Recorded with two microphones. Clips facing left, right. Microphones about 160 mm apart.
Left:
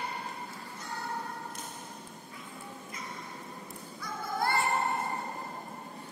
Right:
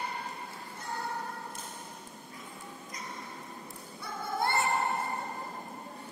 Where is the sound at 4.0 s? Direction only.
25° right (ahead or behind).